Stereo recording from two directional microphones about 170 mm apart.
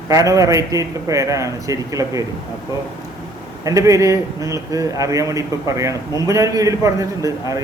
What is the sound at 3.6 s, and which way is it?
Speech, 20° right (ahead or behind).